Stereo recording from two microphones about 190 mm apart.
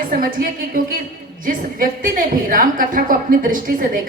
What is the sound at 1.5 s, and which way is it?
A woman's voice, 45° right (ahead or behind).